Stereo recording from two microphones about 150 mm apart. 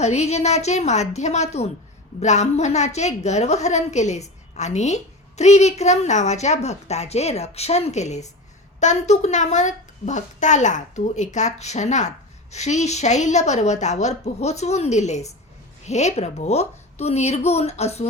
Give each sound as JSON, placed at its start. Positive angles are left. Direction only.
{"t": 0.0, "sound": "a woman's voice", "side_deg": 45}